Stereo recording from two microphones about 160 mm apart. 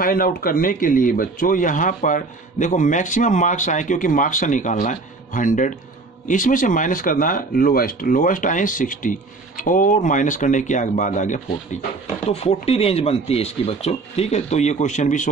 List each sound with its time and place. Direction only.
0.0 s speech: 65° left (ahead or behind)
12.3 s speech: 40° left (ahead or behind)